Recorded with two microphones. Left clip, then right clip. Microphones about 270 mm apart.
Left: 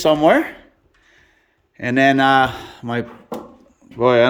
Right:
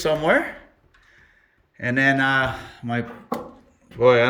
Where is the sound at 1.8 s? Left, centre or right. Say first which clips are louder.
Left 5 dB; centre.